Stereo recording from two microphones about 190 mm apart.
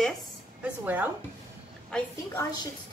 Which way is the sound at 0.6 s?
10° right (ahead or behind).